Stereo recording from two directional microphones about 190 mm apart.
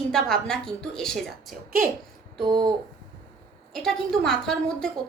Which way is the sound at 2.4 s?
20° right (ahead or behind).